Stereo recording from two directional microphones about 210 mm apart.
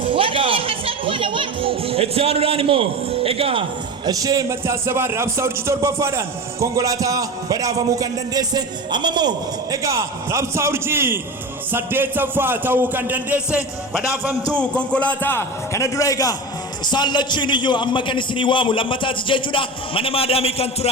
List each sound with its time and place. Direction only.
0.0 s speech: 25° right (ahead or behind); by 13.6 s 5° right (ahead or behind)
14.5 s a man's voice: 5° left (ahead or behind); by 20.9 s 30° left (ahead or behind)